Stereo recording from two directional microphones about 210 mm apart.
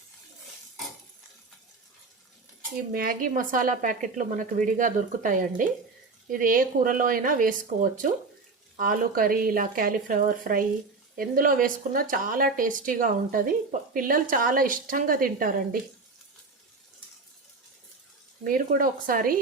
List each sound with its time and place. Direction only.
2.9 s a woman's voice: 45° right (ahead or behind)
18.4 s speech: 40° right (ahead or behind)